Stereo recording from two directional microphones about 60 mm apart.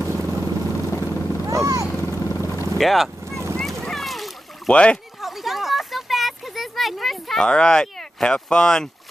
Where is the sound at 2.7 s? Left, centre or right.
Centre.